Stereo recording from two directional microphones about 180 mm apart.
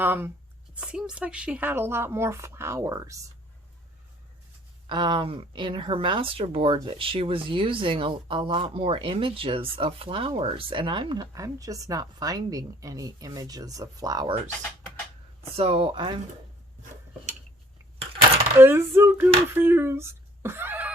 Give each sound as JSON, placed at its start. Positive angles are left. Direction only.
{"t": 0.0, "sound": "speech", "side_deg": -10}
{"t": 4.9, "sound": "speech", "side_deg": -25}
{"t": 15.5, "sound": "speech", "side_deg": -30}
{"t": 18.6, "sound": "a sound", "side_deg": -15}